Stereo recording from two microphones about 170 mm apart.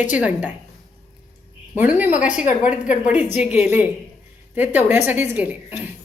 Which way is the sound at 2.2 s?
45° left (ahead or behind).